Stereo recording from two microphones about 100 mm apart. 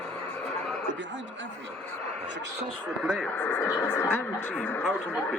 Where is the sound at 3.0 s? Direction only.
5° right (ahead or behind).